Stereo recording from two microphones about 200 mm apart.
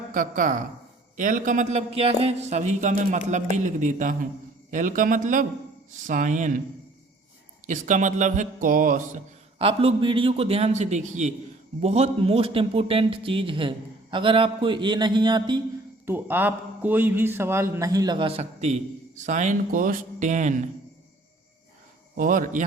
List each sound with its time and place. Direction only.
0.1 s speech: 40° right (ahead or behind)
7.7 s speech: 40° right (ahead or behind)
9.6 s a man's voice: 30° right (ahead or behind)
16.0 s a man's voice: 10° right (ahead or behind); by 20.5 s 35° right (ahead or behind)
22.1 s a man's voice: 45° right (ahead or behind)